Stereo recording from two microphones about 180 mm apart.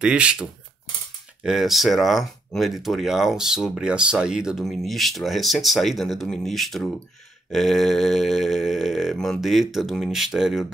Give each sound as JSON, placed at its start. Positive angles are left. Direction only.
{"t": 0.0, "sound": "speech", "side_deg": -5}